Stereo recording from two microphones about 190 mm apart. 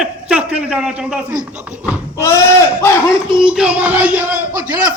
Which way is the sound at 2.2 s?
15° left (ahead or behind).